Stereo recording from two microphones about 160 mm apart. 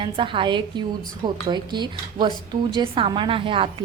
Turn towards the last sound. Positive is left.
turn(degrees=-35)  # may be behind; listen again after turning